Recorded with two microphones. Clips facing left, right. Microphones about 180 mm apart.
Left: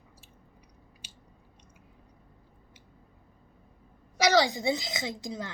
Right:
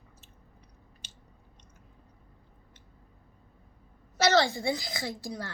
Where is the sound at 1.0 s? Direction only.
10° left (ahead or behind).